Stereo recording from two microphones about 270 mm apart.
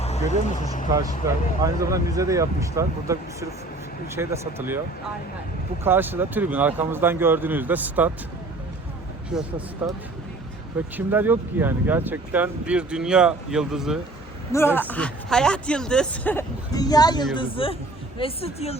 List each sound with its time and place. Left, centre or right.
0.0 s speech: left
1.6 s speech: centre
5.8 s speech: centre
9.3 s speech: centre
14.5 s a woman's voice: centre